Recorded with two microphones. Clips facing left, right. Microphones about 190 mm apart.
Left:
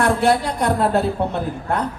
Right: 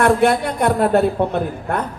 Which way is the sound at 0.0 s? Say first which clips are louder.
Right 2 dB; 55° right (ahead or behind).